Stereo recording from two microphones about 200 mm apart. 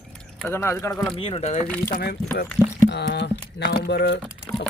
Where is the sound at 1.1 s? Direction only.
25° left (ahead or behind).